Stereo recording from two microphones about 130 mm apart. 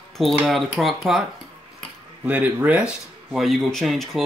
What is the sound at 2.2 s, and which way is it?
Speech, 10° right (ahead or behind).